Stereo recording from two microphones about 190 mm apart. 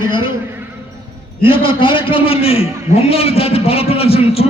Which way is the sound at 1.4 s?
25° left (ahead or behind).